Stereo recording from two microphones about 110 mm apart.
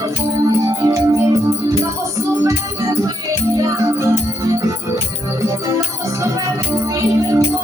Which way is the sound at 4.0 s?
30° right (ahead or behind).